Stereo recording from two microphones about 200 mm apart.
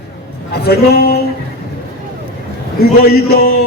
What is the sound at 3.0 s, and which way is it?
Speech, 50° left (ahead or behind).